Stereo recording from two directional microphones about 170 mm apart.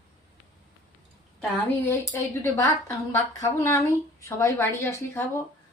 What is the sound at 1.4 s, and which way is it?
A woman's voice, 10° left (ahead or behind).